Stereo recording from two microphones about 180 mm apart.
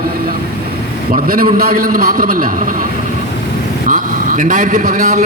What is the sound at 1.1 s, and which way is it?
A man's voice, 55° right (ahead or behind).